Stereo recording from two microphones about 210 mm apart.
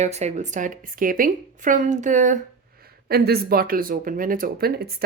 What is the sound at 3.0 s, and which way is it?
Speech, 50° right (ahead or behind).